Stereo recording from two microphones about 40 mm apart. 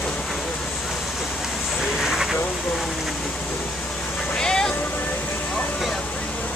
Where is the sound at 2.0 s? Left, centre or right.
Centre.